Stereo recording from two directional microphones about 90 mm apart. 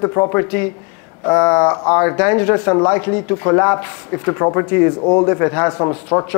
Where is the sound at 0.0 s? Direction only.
25° left (ahead or behind).